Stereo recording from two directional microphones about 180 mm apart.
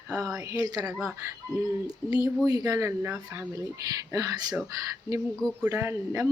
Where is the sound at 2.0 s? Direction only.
10° left (ahead or behind).